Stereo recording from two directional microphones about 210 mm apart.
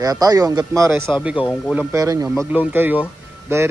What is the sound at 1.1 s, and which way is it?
Speech, 5° right (ahead or behind).